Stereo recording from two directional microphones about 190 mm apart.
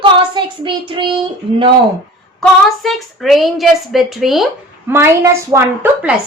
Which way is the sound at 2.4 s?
Centre (ahead or behind).